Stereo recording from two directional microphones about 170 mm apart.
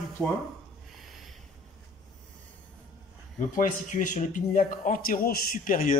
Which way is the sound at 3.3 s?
50° left (ahead or behind).